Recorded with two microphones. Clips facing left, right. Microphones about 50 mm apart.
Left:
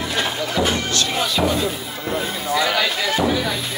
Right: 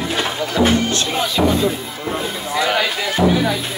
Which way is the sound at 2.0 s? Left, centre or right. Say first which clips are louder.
Even; centre.